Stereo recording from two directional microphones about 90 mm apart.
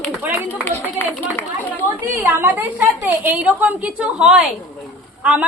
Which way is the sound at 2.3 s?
25° right (ahead or behind).